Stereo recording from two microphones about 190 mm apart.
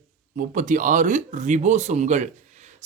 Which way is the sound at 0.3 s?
45° right (ahead or behind).